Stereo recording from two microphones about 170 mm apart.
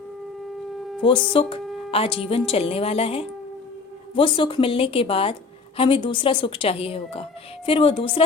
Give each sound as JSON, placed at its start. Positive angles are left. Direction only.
{"t": 1.0, "sound": "a woman's voice", "side_deg": 30}